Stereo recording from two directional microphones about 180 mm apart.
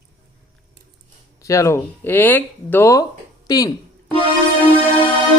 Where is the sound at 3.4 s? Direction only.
20° left (ahead or behind).